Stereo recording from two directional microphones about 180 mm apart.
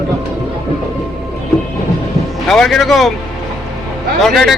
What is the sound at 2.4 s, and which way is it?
Speech, centre (ahead or behind).